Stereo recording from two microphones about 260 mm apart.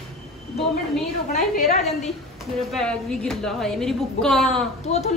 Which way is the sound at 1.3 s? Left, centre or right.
Left.